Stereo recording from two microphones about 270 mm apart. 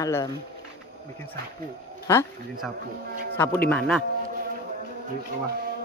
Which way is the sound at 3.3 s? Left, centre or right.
Centre.